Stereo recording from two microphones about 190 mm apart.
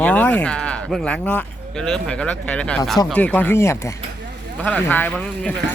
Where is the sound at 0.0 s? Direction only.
5° left (ahead or behind).